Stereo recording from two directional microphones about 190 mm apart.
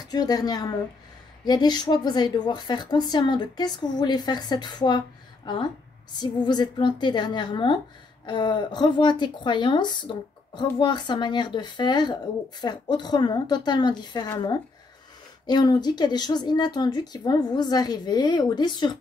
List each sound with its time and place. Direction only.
0.1 s a woman's voice: 20° left (ahead or behind)
15.4 s a woman's voice: 20° left (ahead or behind)